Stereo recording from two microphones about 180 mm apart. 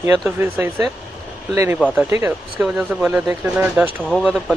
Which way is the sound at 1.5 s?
15° right (ahead or behind).